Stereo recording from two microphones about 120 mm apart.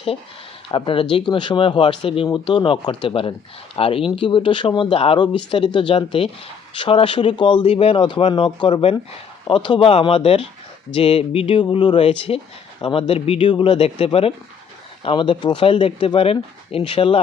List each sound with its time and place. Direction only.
0.7 s speech: 45° left (ahead or behind)
15.0 s speech: 45° left (ahead or behind)